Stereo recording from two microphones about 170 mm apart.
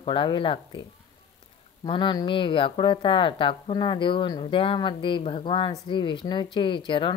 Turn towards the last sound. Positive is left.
turn(degrees=30)  # may be behind; listen again after turning